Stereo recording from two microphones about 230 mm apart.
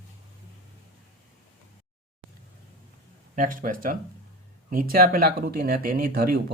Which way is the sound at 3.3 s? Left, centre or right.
Right.